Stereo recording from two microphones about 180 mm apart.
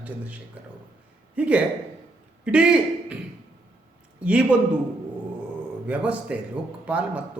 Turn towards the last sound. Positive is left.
turn(degrees=-5)  # may be behind; listen again after turning